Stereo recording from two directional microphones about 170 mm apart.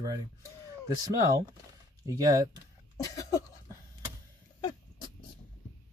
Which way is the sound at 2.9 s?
20° left (ahead or behind).